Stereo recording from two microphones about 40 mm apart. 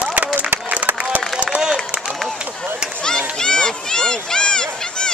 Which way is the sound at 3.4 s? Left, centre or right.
Centre.